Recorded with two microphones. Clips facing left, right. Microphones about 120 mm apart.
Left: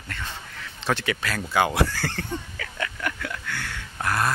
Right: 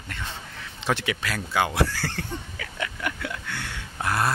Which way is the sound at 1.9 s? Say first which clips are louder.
Left 2 dB; 10° right (ahead or behind).